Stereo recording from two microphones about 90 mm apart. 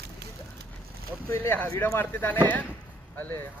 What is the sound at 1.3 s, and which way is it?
Speech, 25° left (ahead or behind).